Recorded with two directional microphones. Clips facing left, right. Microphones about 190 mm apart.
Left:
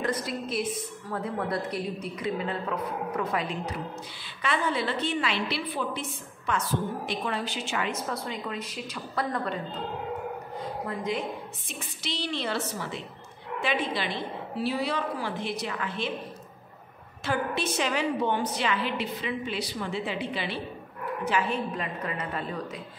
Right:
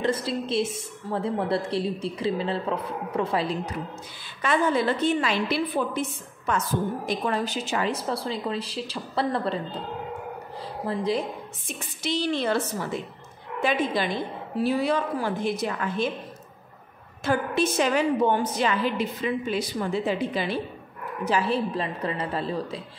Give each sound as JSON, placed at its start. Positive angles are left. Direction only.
{"t": 0.0, "sound": "a woman's voice", "side_deg": -25}
{"t": 4.4, "sound": "a woman's voice", "side_deg": -45}
{"t": 10.6, "sound": "a woman's voice", "side_deg": -30}
{"t": 17.2, "sound": "a woman's voice", "side_deg": -45}